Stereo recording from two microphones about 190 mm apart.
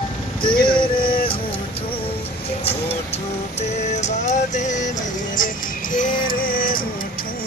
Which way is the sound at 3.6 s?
40° left (ahead or behind).